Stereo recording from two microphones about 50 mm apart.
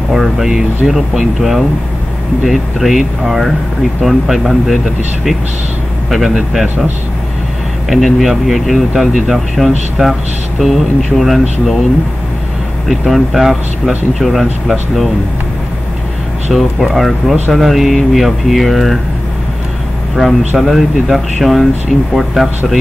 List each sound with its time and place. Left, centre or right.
0.1 s speech: centre
6.0 s speech: centre
7.9 s speech: centre
12.8 s speech: centre
16.5 s speech: centre
20.2 s speech: centre